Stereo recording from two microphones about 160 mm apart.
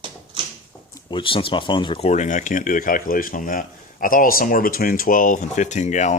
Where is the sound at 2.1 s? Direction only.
50° left (ahead or behind).